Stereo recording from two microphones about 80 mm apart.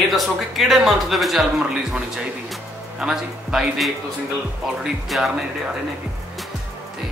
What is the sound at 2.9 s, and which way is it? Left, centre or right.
A man's voice, centre.